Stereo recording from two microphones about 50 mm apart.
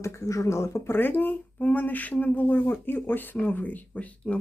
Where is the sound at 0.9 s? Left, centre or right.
Left.